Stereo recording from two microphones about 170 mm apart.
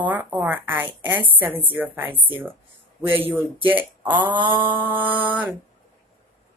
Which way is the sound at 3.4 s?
10° right (ahead or behind).